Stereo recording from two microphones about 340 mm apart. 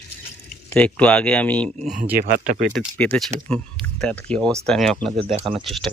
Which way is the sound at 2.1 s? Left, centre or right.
Right.